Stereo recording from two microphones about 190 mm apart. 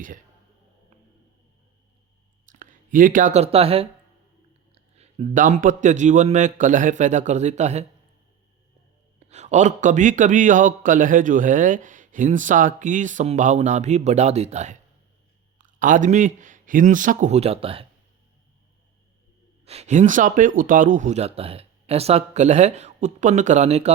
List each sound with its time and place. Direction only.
2.5 s a man's voice: 45° right (ahead or behind)
9.3 s a man's voice: 35° right (ahead or behind)
19.6 s a man's voice: 35° right (ahead or behind)